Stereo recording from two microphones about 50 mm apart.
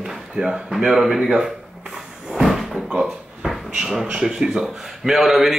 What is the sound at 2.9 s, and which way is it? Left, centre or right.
Cupboard open or close, right.